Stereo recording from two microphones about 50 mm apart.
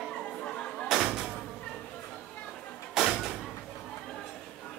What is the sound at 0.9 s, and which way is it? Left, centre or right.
Music, centre.